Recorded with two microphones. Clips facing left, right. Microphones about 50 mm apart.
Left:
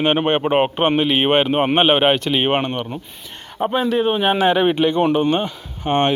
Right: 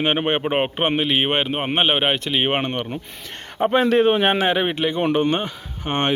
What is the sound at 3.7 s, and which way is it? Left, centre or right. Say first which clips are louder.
Speech: right 2 dB; right.